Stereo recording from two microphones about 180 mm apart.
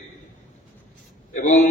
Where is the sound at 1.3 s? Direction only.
45° left (ahead or behind).